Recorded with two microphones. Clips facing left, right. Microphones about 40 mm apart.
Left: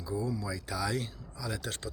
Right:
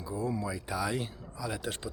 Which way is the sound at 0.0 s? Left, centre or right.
Right.